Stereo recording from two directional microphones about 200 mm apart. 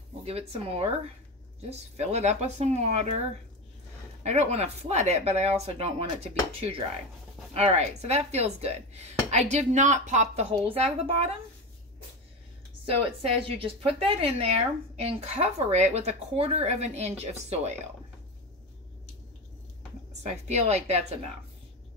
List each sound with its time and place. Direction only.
0.2 s a woman's voice: 30° right (ahead or behind)
4.2 s a woman's voice: 35° right (ahead or behind)
12.8 s a woman's voice: 30° right (ahead or behind)
20.2 s a woman's voice: 35° right (ahead or behind)